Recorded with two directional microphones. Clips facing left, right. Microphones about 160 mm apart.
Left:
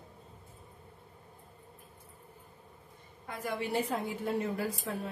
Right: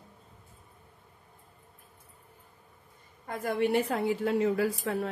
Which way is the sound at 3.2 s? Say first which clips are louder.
Right 7 dB; 50° right (ahead or behind).